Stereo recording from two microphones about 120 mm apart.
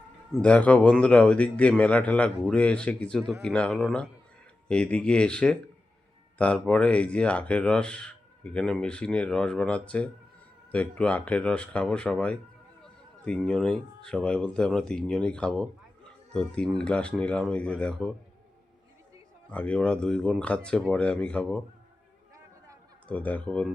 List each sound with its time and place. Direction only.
0.3 s a man's voice: 10° left (ahead or behind)
19.5 s speech: 10° left (ahead or behind)
23.0 s speech: 10° left (ahead or behind)